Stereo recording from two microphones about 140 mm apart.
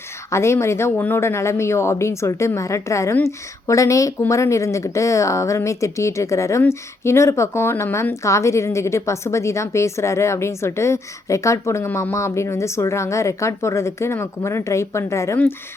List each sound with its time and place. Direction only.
0.3 s speech: 20° left (ahead or behind)